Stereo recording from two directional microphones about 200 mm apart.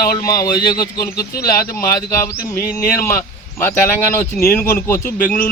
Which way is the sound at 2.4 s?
45° left (ahead or behind).